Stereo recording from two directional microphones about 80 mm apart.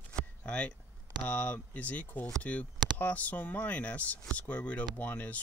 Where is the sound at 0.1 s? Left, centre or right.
Centre.